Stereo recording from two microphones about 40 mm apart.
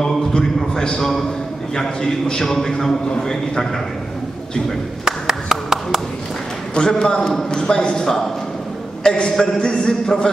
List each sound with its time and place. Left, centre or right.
0.0 s a sound: centre
0.7 s a man's voice: centre
5.0 s clapping: centre
6.7 s a man's voice: left
9.3 s a man's voice: centre
9.6 s a man's voice: left